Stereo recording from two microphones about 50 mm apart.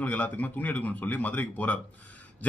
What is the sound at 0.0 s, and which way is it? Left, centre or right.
A man's voice, left.